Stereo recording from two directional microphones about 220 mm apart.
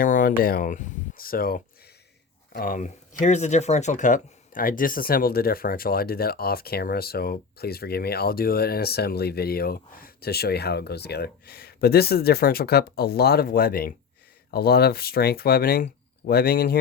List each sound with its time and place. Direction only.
0.0 s speech: 40° left (ahead or behind)